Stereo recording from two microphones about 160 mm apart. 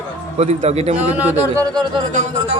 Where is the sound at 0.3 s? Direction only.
45° right (ahead or behind).